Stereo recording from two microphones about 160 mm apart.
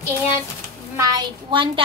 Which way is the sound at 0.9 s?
25° right (ahead or behind).